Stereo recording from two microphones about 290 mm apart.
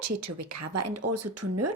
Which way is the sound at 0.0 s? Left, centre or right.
Right.